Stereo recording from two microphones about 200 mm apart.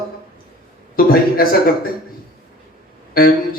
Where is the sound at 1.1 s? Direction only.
45° left (ahead or behind).